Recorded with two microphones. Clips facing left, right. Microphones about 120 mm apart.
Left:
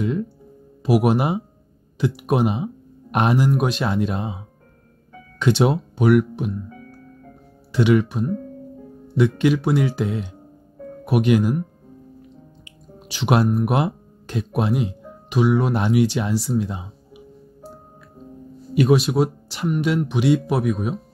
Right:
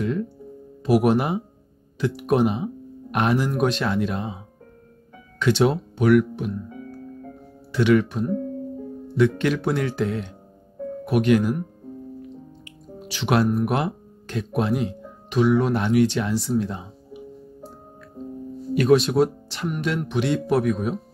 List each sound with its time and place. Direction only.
0.0 s speech: 15° left (ahead or behind)
5.4 s speech: 15° left (ahead or behind)
7.7 s speech: 15° left (ahead or behind)
13.1 s speech: 15° left (ahead or behind)
18.8 s speech: 10° left (ahead or behind)